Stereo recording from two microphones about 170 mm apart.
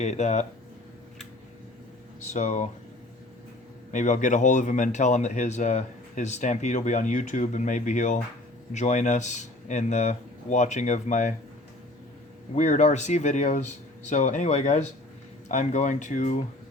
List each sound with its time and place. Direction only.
0.0 s speech: 45° left (ahead or behind)
2.2 s speech: 45° left (ahead or behind)
3.9 s speech: 45° left (ahead or behind)
12.5 s speech: 45° left (ahead or behind)